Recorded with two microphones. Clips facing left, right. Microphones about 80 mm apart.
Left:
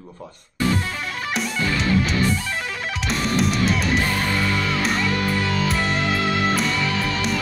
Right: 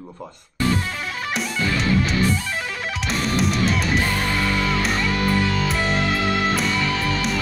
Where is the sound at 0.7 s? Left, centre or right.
Centre.